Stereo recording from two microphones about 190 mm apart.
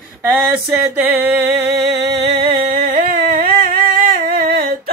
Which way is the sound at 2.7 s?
45° right (ahead or behind).